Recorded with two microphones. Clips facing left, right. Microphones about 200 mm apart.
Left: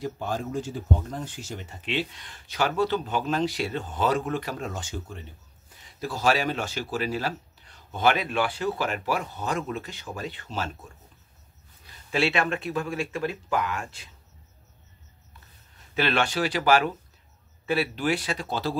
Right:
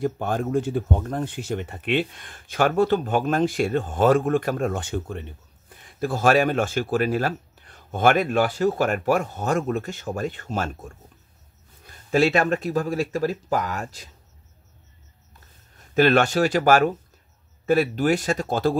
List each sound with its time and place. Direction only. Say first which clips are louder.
0.0 s speech: right 6 dB; 55° right (ahead or behind); by 14.1 s 40° right (ahead or behind)
15.9 s speech: right 8 dB; 45° right (ahead or behind)